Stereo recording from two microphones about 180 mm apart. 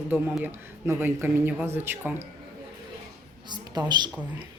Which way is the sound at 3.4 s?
25° right (ahead or behind).